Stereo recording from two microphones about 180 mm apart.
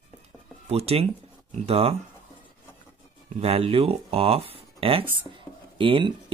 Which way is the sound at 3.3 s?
35° right (ahead or behind).